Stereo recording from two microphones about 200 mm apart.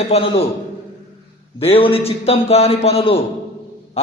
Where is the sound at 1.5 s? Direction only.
30° left (ahead or behind).